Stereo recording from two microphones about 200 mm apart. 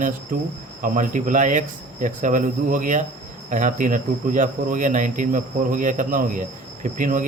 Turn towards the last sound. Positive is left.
turn(degrees=-40)  # may be behind; listen again after turning